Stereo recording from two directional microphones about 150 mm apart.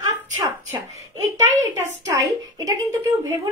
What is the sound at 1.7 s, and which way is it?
A woman's voice, 20° right (ahead or behind).